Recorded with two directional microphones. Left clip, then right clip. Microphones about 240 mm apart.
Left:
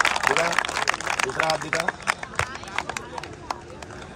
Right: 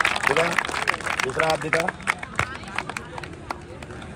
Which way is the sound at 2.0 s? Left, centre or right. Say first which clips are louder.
Right 1 dB; left.